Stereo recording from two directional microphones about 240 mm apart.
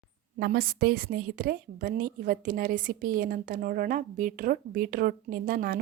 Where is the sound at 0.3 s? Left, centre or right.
Right.